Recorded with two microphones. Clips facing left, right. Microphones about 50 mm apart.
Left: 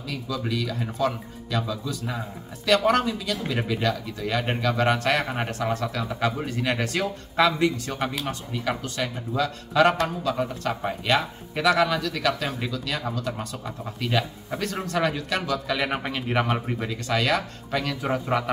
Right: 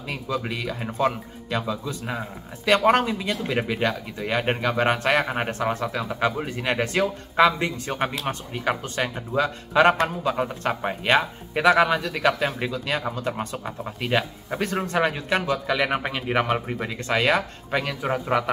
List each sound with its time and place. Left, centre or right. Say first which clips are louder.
0.1 s speech: right 1 dB; right
15.7 s speech: right 3 dB; centre
18.0 s speech: right 2 dB; centre